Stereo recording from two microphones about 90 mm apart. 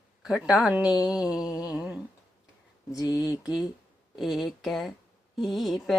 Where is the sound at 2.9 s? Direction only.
45° left (ahead or behind).